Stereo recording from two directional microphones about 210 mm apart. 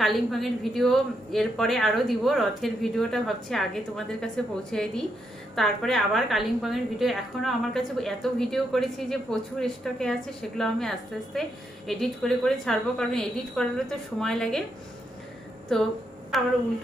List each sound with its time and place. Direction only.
0.0 s speech: centre (ahead or behind)
16.3 s speech: centre (ahead or behind)